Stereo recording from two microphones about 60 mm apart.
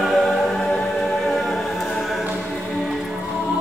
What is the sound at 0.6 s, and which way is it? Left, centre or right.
Music, centre.